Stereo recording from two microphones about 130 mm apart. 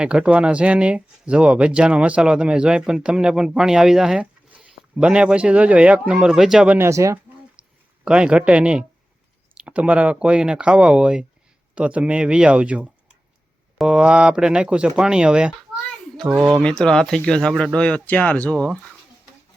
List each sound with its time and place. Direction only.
0.0 s speech: 5° right (ahead or behind)
6.7 s speech: 20° right (ahead or behind)
8.0 s a child's voice: 10° right (ahead or behind)